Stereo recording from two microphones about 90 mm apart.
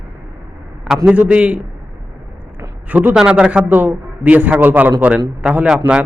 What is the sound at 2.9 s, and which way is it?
A man's voice, 20° right (ahead or behind).